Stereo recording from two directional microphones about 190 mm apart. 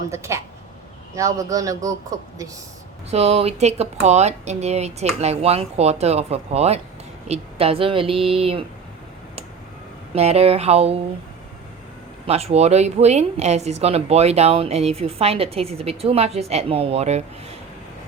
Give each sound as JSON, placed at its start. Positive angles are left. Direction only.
{"t": 0.1, "sound": "speech", "side_deg": -15}
{"t": 3.1, "sound": "a woman's voice", "side_deg": -35}
{"t": 10.2, "sound": "a woman's voice", "side_deg": -35}
{"t": 12.2, "sound": "a woman's voice", "side_deg": -30}